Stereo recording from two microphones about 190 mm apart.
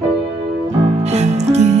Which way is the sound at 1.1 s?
35° right (ahead or behind).